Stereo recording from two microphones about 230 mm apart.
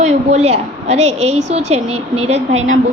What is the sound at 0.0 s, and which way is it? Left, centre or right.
A woman's voice, right.